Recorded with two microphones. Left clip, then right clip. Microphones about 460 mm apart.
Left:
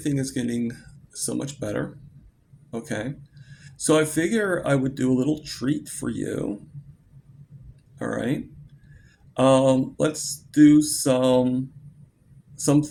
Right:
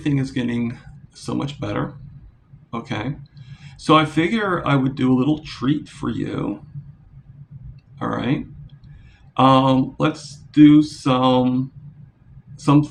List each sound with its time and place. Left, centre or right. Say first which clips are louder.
0.3 s speech: right 3 dB; left
7.9 s speech: right 4 dB; left